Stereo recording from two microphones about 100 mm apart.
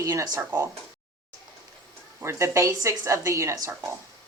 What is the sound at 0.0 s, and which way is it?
Speech, 30° right (ahead or behind).